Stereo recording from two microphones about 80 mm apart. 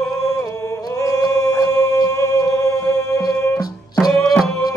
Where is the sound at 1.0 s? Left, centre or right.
Left.